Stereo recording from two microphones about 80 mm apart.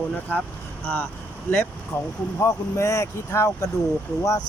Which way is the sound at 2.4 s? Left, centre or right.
Left.